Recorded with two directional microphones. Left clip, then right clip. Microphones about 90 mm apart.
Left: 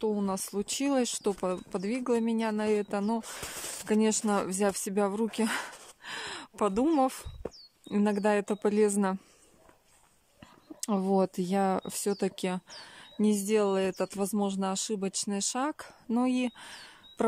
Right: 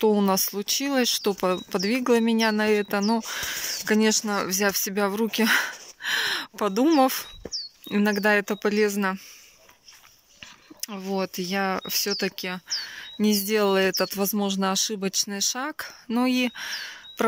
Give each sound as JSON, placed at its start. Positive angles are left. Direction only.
{"t": 0.0, "sound": "speech", "side_deg": -15}
{"t": 0.3, "sound": "speech", "side_deg": 10}
{"t": 0.6, "sound": "speech", "side_deg": 25}
{"t": 1.7, "sound": "speech", "side_deg": 5}
{"t": 3.1, "sound": "speech", "side_deg": 5}
{"t": 4.0, "sound": "speech", "side_deg": 25}
{"t": 4.5, "sound": "speech", "side_deg": 35}
{"t": 5.2, "sound": "speech", "side_deg": 15}
{"t": 7.9, "sound": "speech", "side_deg": 25}
{"t": 10.9, "sound": "speech", "side_deg": 70}